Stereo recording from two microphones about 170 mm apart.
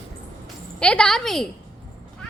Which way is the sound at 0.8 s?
5° left (ahead or behind).